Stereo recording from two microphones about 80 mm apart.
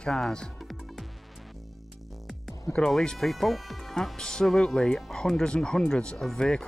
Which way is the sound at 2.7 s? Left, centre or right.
Centre.